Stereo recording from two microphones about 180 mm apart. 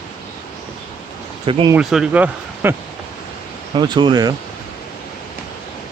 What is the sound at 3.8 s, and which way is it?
Speech, 25° right (ahead or behind).